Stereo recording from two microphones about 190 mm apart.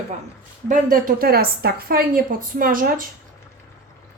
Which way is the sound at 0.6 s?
45° right (ahead or behind).